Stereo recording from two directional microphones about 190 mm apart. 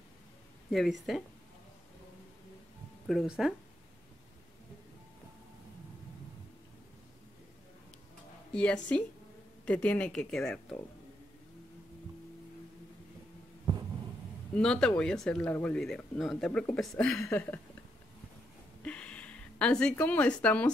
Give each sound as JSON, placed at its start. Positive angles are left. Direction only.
{"t": 0.7, "sound": "speech", "side_deg": 0}
{"t": 3.1, "sound": "speech", "side_deg": 0}
{"t": 8.5, "sound": "speech", "side_deg": 5}
{"t": 14.5, "sound": "speech", "side_deg": 5}
{"t": 17.3, "sound": "a sound", "side_deg": 10}
{"t": 18.8, "sound": "a sound", "side_deg": 5}